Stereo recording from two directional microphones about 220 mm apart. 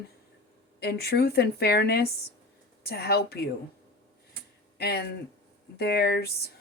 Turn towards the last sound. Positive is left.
turn(degrees=45)  # may be behind; listen again after turning